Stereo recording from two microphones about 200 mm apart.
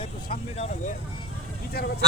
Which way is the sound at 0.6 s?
40° left (ahead or behind).